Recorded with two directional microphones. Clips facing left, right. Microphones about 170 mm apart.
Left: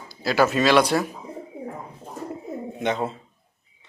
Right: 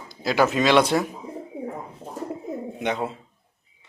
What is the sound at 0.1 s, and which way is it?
Speech, 20° right (ahead or behind).